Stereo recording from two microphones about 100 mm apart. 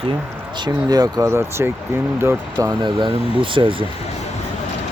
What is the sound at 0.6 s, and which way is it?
Speech, 40° right (ahead or behind).